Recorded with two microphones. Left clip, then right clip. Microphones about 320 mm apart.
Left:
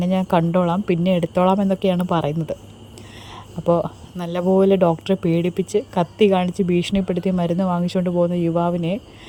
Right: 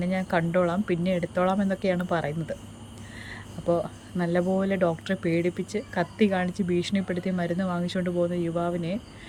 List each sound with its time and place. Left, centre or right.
0.0 s speech: left
4.2 s speech: centre